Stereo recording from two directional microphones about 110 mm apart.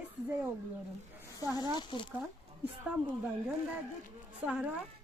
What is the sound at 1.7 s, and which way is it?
Speech, 50° left (ahead or behind).